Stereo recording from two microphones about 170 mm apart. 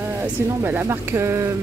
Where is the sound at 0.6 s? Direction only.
15° right (ahead or behind).